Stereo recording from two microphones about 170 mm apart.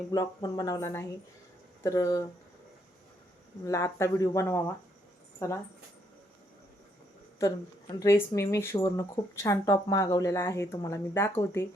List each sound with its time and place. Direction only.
0.1 s speech: 20° left (ahead or behind)
3.7 s speech: 15° left (ahead or behind)
7.3 s speech: 20° left (ahead or behind)